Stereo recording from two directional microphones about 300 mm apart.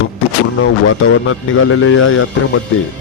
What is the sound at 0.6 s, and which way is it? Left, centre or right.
A man's voice, left.